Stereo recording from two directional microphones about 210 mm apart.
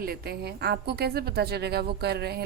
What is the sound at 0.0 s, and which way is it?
Speech, 45° right (ahead or behind).